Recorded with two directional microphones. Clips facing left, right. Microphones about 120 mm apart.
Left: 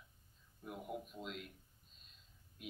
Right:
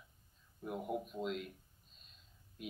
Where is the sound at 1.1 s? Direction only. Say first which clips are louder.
Right 8 dB; 40° right (ahead or behind).